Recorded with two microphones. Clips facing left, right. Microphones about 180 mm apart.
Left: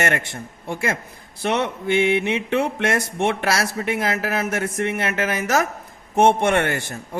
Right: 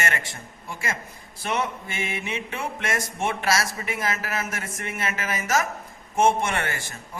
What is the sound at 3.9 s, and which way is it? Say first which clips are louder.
A man's voice: left 6 dB; 65° left (ahead or behind).